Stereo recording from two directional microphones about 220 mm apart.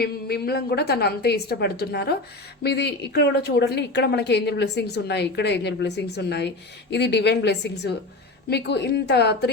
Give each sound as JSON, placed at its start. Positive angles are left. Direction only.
{"t": 0.0, "sound": "a woman's voice", "side_deg": 45}